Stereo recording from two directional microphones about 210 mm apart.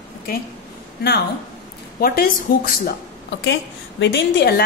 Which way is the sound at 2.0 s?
45° left (ahead or behind).